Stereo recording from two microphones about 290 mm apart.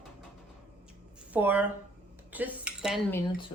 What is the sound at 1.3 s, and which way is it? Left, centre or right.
A woman's voice, centre.